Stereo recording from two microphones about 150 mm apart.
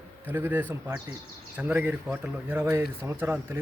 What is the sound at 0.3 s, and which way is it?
Speech, 15° right (ahead or behind).